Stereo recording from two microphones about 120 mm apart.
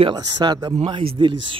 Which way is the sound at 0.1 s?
35° right (ahead or behind).